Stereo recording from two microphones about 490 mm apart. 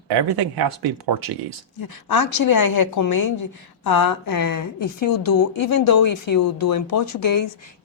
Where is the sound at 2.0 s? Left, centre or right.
Left.